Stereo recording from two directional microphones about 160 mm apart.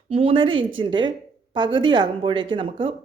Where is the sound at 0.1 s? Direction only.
35° right (ahead or behind).